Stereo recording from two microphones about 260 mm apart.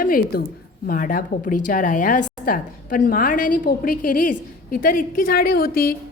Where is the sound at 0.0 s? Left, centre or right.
Left.